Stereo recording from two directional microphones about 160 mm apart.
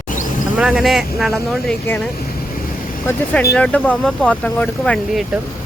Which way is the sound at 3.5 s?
10° left (ahead or behind).